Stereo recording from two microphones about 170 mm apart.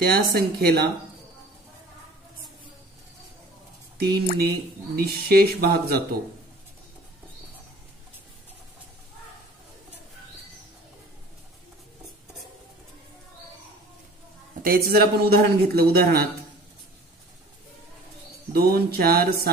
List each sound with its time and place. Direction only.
0.0 s a man's voice: 60° right (ahead or behind)
4.0 s speech: 70° right (ahead or behind)
14.6 s a man's voice: 60° right (ahead or behind)
18.5 s a man's voice: 65° right (ahead or behind)